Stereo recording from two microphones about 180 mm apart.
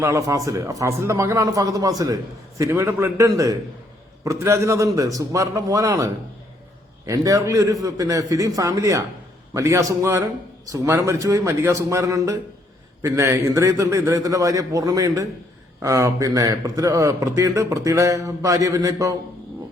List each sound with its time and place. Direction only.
0.0 s a man's voice: 15° right (ahead or behind)